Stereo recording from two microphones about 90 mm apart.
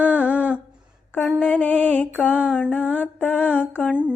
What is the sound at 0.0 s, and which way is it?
Humming, 15° right (ahead or behind).